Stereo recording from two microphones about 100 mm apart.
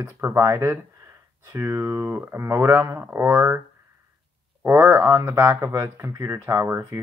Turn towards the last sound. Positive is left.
turn(degrees=-25)  # may be behind; listen again after turning